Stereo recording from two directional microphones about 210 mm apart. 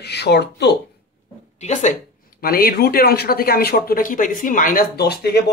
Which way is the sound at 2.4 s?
45° left (ahead or behind).